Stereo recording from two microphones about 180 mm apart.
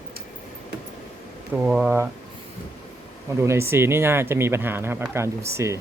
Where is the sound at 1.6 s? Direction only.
5° right (ahead or behind).